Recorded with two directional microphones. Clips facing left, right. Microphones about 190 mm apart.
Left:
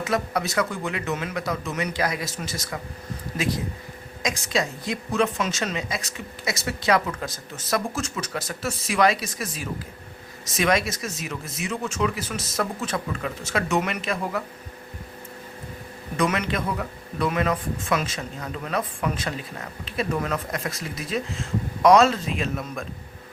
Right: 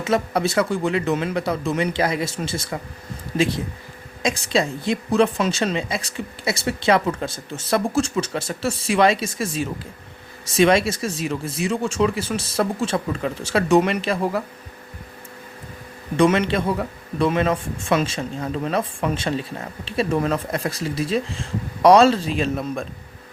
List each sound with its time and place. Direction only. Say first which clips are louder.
0.0 s speech: right 5 dB; 25° right (ahead or behind)
16.1 s speech: right 7 dB; 30° right (ahead or behind)